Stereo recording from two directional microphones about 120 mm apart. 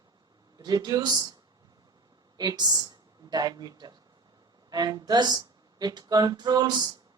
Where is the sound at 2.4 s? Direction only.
35° right (ahead or behind).